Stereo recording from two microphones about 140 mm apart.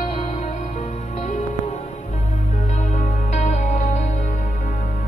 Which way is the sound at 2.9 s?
60° left (ahead or behind).